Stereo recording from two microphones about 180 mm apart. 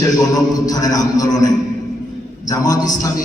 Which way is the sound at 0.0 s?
20° left (ahead or behind).